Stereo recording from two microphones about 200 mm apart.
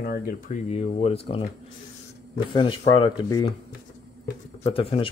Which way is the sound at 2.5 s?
25° left (ahead or behind).